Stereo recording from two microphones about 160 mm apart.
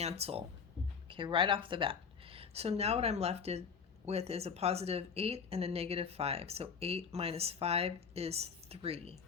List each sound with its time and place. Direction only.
0.0 s a woman's voice: 40° right (ahead or behind)